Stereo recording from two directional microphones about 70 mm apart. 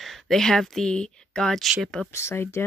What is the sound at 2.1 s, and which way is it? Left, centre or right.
Speech, left.